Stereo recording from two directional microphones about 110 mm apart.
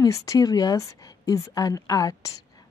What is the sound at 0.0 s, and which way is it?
Speech, 30° left (ahead or behind).